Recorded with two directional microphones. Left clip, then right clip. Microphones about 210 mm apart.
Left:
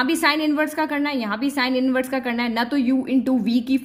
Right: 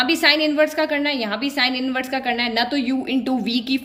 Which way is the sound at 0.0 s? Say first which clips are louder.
Right 3 dB; 50° left (ahead or behind).